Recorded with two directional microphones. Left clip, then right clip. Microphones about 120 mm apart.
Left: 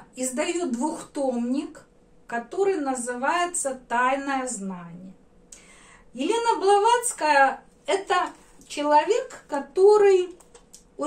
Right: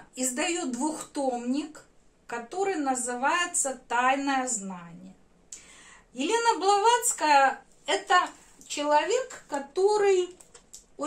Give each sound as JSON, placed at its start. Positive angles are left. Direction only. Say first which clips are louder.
{"t": 0.1, "sound": "a woman's voice", "louder": "left 2 dB", "side_deg": -30}
{"t": 6.1, "sound": "a woman's voice", "louder": "left 2 dB", "side_deg": -30}